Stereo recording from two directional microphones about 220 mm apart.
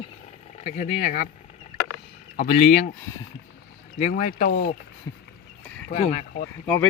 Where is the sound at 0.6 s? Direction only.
35° left (ahead or behind).